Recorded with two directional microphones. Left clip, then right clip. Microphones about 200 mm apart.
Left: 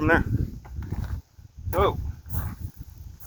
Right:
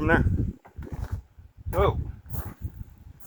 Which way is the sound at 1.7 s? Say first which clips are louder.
Left 1 dB; 60° left (ahead or behind).